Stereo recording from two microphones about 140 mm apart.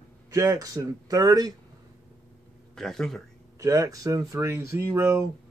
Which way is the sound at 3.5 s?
25° right (ahead or behind).